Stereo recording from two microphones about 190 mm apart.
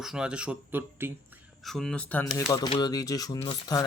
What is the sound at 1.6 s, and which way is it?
Speech, centre (ahead or behind).